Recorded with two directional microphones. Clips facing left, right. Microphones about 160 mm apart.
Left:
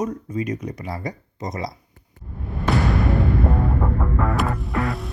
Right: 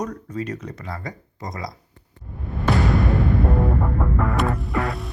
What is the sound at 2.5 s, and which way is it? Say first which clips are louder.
Music: right 1 dB; centre (ahead or behind).